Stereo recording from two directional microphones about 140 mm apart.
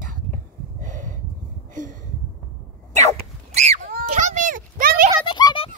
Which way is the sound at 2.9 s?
50° right (ahead or behind).